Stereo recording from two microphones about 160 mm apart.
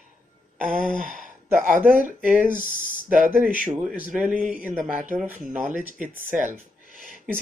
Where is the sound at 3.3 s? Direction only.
10° right (ahead or behind).